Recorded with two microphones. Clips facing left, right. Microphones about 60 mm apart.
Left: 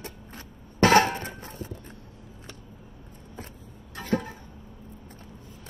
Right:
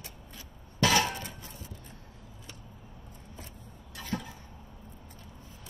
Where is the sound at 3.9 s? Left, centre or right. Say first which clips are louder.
Left 8 dB; left.